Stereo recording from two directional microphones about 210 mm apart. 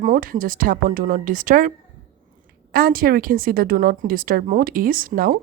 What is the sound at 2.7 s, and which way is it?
A woman's voice, 45° right (ahead or behind).